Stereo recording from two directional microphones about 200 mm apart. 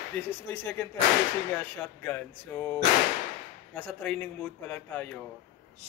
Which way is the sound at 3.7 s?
10° left (ahead or behind).